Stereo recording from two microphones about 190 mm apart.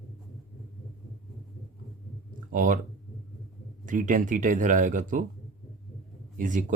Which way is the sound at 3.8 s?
45° right (ahead or behind).